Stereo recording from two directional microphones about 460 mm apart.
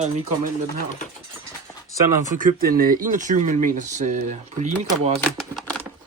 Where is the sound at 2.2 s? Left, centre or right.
Centre.